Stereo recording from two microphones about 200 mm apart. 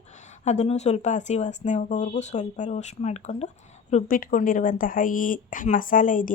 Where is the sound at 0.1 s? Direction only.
35° left (ahead or behind).